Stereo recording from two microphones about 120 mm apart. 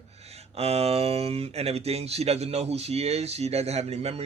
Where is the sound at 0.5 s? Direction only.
60° right (ahead or behind).